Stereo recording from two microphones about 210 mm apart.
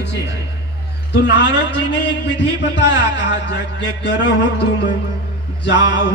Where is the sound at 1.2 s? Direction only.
60° left (ahead or behind).